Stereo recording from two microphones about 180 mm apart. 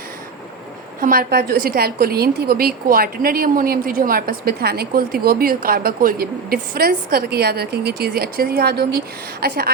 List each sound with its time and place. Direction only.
1.0 s a woman's voice: 55° right (ahead or behind)